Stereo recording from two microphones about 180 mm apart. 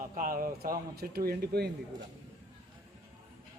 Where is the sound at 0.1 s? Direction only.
50° right (ahead or behind).